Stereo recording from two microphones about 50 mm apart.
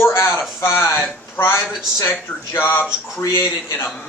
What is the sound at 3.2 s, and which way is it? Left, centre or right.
Speech, left.